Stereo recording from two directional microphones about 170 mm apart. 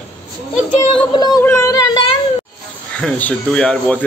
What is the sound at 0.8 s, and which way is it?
A woman's voice, 25° left (ahead or behind).